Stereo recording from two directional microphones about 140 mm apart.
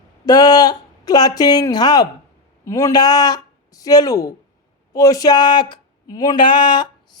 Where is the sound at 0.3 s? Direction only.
30° left (ahead or behind).